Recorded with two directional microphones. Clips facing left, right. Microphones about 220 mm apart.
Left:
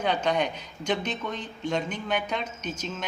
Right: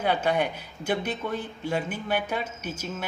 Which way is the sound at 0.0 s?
5° right (ahead or behind).